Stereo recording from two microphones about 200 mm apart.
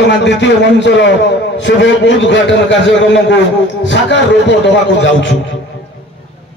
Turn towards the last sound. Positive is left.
turn(degrees=65)  # may be behind; listen again after turning